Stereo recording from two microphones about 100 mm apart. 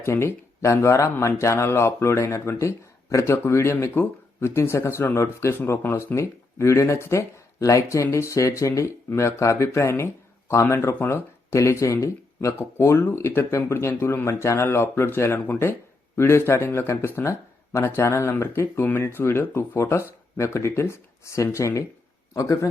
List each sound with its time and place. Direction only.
0.0 s speech: 25° left (ahead or behind)